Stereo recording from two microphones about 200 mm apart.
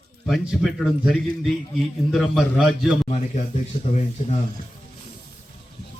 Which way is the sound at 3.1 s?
35° left (ahead or behind).